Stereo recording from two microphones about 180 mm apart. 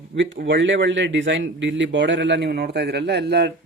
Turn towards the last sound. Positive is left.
turn(degrees=-65)  # may be behind; listen again after turning